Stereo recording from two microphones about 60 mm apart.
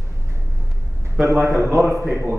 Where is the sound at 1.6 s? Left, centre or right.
Right.